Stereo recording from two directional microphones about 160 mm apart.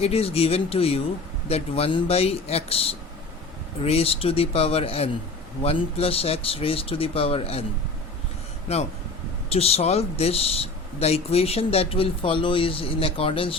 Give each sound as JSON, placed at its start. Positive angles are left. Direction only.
{"t": 0.0, "sound": "speech", "side_deg": 40}
{"t": 8.7, "sound": "speech", "side_deg": 40}